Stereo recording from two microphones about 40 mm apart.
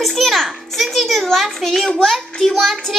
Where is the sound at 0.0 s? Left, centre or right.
Centre.